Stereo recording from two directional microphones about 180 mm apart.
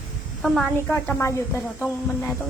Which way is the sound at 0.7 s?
10° left (ahead or behind).